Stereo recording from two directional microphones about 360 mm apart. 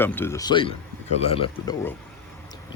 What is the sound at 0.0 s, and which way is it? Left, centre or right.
Speech, centre.